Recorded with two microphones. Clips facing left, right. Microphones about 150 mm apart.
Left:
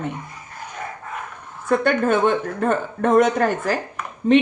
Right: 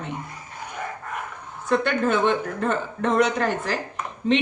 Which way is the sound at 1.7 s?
45° left (ahead or behind).